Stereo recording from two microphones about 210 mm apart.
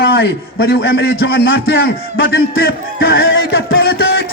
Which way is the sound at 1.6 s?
45° left (ahead or behind).